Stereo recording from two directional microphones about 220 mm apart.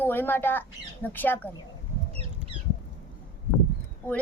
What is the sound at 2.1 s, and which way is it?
Rodents, 25° right (ahead or behind).